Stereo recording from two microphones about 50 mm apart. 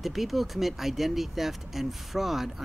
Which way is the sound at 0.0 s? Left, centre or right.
Centre.